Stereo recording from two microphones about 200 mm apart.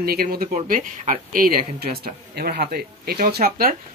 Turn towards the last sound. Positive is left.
turn(degrees=-45)  # may be behind; listen again after turning